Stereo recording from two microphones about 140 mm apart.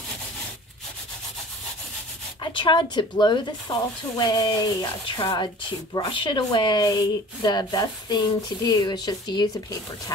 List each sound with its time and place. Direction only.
2.4 s speech: 35° left (ahead or behind)